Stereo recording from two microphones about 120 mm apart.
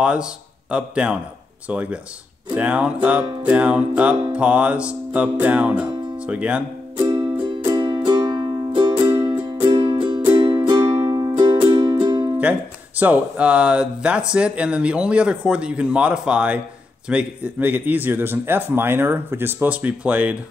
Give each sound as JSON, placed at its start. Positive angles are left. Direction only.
{"t": 0.0, "sound": "speech", "side_deg": -10}
{"t": 4.3, "sound": "music", "side_deg": -10}
{"t": 7.0, "sound": "music", "side_deg": -40}
{"t": 12.4, "sound": "speech", "side_deg": -10}